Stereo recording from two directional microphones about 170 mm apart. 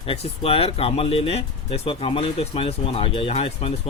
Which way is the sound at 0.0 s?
35° left (ahead or behind).